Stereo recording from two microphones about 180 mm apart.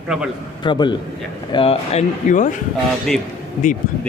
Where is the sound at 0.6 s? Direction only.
25° left (ahead or behind); by 2.5 s 45° left (ahead or behind).